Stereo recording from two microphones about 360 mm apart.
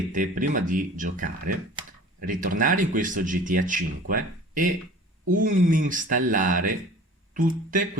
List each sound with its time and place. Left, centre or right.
0.1 s speech: right